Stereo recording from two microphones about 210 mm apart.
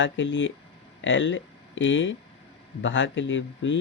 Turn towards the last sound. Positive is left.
turn(degrees=60)  # may be behind; listen again after turning